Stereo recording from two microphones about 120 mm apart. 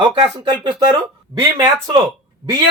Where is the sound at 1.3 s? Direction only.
35° right (ahead or behind).